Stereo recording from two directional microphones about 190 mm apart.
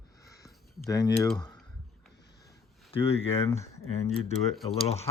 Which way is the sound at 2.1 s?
60° left (ahead or behind).